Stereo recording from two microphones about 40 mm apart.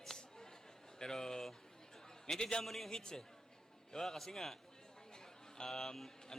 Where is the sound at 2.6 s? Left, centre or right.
Centre.